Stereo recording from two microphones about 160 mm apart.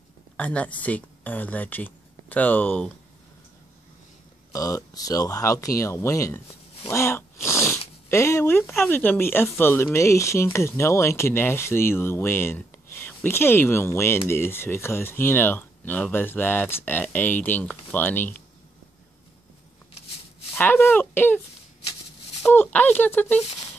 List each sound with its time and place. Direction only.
0.4 s speech: 10° left (ahead or behind)
4.5 s speech: 20° left (ahead or behind)
6.9 s cat: 15° left (ahead or behind)
8.1 s speech: 15° left (ahead or behind)
20.5 s speech: 15° left (ahead or behind)
22.4 s speech: 15° left (ahead or behind)